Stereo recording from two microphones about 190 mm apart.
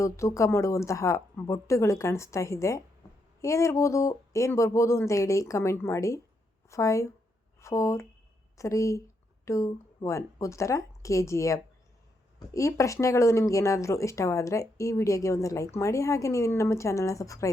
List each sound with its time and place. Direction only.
0.0 s speech: 15° left (ahead or behind)